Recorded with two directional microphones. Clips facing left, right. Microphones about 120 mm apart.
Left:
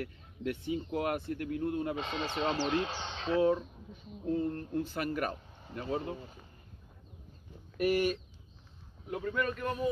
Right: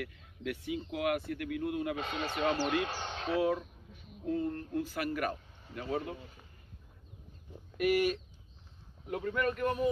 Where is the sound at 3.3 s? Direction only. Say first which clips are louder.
Left 3 dB; 30° left (ahead or behind).